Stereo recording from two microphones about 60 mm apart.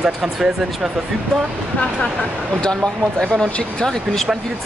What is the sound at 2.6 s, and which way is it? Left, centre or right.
Speech, centre.